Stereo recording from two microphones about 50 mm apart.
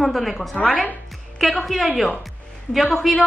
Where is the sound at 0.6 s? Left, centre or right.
Left.